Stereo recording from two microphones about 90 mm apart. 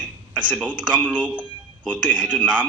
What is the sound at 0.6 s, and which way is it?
Speech, 15° right (ahead or behind).